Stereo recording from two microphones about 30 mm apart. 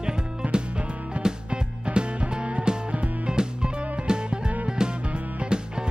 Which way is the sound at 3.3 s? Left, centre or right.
Right.